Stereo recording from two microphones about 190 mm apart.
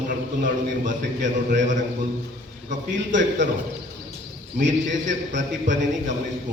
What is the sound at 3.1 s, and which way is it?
Speech, 70° right (ahead or behind).